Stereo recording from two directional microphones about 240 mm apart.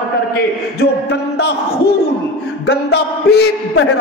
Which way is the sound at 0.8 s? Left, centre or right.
Left.